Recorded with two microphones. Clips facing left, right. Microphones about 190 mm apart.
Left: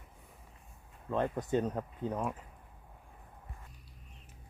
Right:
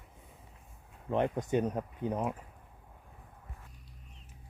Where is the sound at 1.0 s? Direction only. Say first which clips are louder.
Right 2 dB; 20° right (ahead or behind).